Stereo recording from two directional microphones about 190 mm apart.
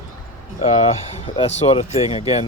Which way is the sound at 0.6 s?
35° left (ahead or behind).